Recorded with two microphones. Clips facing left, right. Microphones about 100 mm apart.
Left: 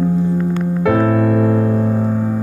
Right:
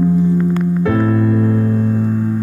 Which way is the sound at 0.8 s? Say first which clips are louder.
Left 3 dB; 90° left.